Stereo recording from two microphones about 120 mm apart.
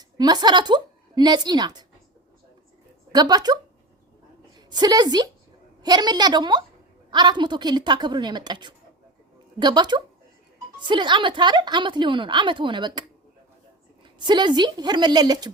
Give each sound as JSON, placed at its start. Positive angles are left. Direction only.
{"t": 0.2, "sound": "speech", "side_deg": -35}
{"t": 3.1, "sound": "a woman's voice", "side_deg": -35}
{"t": 14.2, "sound": "speech", "side_deg": -40}